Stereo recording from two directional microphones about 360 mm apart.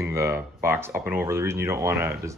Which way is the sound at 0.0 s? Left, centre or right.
Centre.